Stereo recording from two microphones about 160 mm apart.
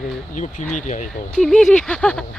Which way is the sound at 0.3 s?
50° left (ahead or behind).